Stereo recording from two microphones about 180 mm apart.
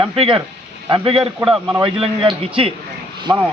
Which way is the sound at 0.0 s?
30° right (ahead or behind).